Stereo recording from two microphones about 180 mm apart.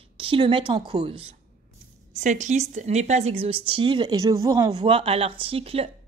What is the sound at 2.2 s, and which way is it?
Speech, 40° right (ahead or behind).